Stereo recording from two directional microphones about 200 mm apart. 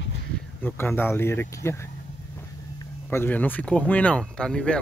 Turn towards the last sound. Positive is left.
turn(degrees=5)  # may be behind; listen again after turning